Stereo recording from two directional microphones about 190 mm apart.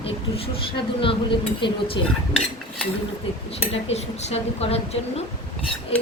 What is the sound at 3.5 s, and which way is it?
A woman's voice, 30° left (ahead or behind).